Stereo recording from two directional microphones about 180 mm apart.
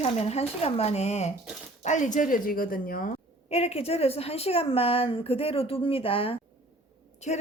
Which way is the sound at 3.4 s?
35° left (ahead or behind).